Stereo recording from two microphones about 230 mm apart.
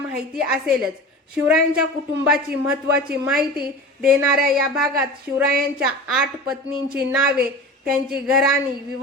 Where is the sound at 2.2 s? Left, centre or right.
Centre.